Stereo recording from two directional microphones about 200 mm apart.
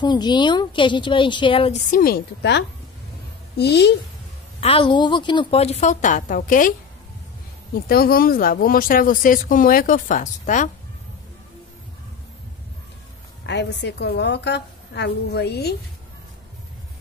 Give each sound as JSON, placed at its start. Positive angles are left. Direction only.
{"t": 0.0, "sound": "a woman's voice", "side_deg": 20}
{"t": 1.9, "sound": "a woman's voice", "side_deg": 45}
{"t": 4.6, "sound": "a woman's voice", "side_deg": 30}
{"t": 7.7, "sound": "speech", "side_deg": 45}
{"t": 13.5, "sound": "a woman's voice", "side_deg": 60}